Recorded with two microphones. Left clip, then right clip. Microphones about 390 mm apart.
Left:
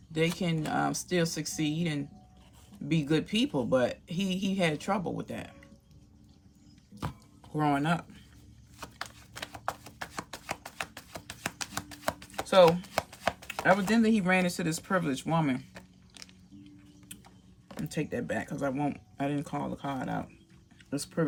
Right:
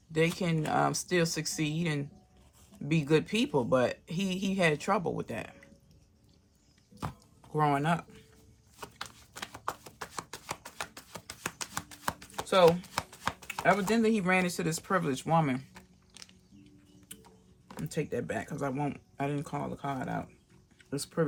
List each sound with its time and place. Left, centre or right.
0.1 s speech: centre
7.5 s speech: centre
8.8 s shuffling cards: centre
12.4 s speech: centre
15.7 s a sound: centre
17.1 s speech: centre